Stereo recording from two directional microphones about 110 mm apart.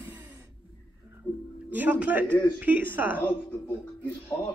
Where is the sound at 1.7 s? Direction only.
15° right (ahead or behind).